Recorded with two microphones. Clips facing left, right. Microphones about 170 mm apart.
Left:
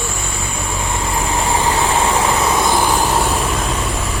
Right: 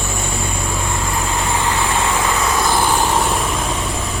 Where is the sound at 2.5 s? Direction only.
20° left (ahead or behind).